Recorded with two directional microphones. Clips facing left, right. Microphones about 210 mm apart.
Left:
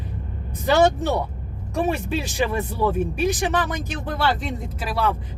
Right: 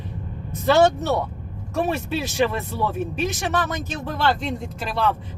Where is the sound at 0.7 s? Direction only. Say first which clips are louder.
Right 1 dB; 15° left (ahead or behind).